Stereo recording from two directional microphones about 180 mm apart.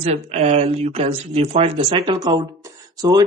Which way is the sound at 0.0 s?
35° right (ahead or behind).